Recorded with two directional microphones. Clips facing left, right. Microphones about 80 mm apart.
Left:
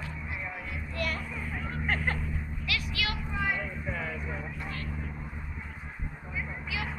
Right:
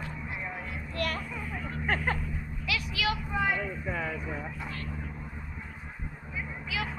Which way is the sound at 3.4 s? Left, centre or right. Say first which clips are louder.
Right 1 dB; right.